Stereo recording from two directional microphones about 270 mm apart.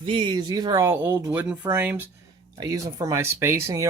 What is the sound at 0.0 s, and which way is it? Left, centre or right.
Speech, centre.